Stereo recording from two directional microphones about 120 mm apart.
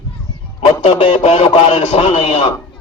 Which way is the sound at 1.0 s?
70° left (ahead or behind).